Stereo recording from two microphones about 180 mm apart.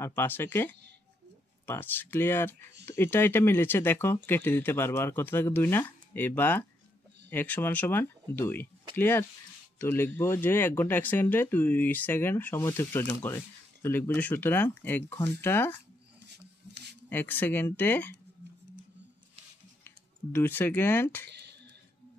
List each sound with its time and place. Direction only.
0.0 s speech: 10° left (ahead or behind)
17.1 s speech: 10° left (ahead or behind)
20.3 s speech: 10° left (ahead or behind)
21.3 s a sound: 70° right (ahead or behind)